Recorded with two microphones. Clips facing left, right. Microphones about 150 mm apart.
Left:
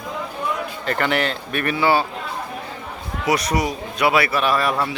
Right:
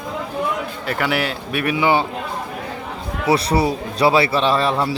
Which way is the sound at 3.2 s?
30° right (ahead or behind).